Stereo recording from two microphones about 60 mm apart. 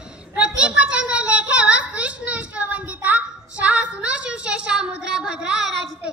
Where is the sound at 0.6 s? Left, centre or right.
Right.